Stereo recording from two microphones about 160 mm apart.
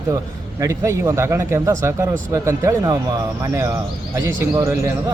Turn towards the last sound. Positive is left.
turn(degrees=-15)  # may be behind; listen again after turning